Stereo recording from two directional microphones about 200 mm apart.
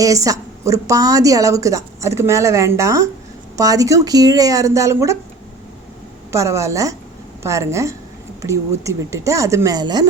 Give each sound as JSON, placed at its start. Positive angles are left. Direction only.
{"t": 0.0, "sound": "speech", "side_deg": -15}
{"t": 6.3, "sound": "speech", "side_deg": -15}